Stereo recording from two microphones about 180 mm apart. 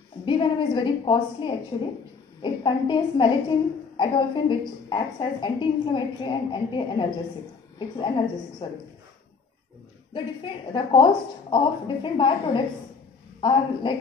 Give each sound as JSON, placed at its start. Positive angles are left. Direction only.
{"t": 0.2, "sound": "a woman's voice", "side_deg": 25}
{"t": 8.6, "sound": "a woman's voice", "side_deg": 25}
{"t": 10.1, "sound": "a woman's voice", "side_deg": 25}